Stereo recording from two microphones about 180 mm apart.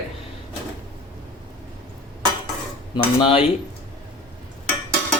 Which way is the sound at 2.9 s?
30° left (ahead or behind).